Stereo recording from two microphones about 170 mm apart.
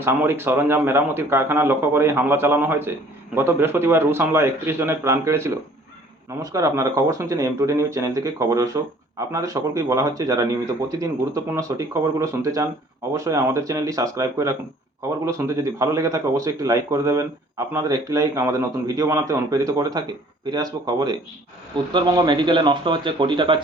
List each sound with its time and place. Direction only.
0.0 s speech: 15° right (ahead or behind); by 23.6 s 30° right (ahead or behind)